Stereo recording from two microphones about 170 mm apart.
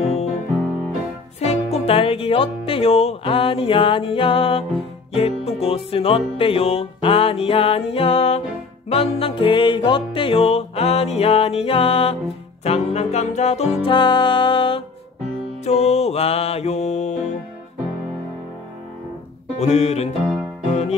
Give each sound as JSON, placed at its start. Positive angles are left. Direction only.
{"t": 0.0, "sound": "music", "side_deg": 40}
{"t": 1.4, "sound": "music", "side_deg": 40}
{"t": 19.5, "sound": "music", "side_deg": 40}